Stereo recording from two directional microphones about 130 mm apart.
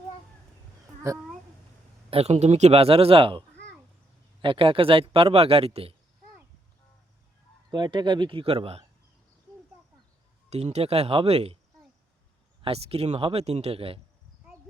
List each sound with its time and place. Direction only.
1.1 s speech: 25° right (ahead or behind)
2.0 s a man's voice: 50° right (ahead or behind)
7.7 s speech: 35° right (ahead or behind)
10.5 s a man's voice: 55° right (ahead or behind)
12.6 s a man's voice: 50° right (ahead or behind)